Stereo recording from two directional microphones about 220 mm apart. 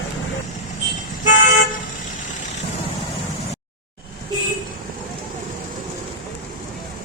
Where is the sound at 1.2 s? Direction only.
35° left (ahead or behind).